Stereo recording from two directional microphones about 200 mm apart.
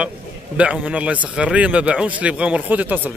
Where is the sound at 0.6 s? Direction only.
5° right (ahead or behind).